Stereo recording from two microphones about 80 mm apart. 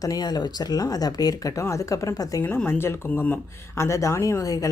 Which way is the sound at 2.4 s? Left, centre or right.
Left.